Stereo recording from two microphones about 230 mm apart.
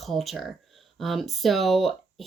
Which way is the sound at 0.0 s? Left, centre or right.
Centre.